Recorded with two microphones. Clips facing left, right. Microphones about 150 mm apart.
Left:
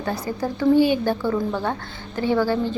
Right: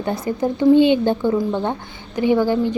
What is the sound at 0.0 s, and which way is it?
A woman's voice, 20° right (ahead or behind).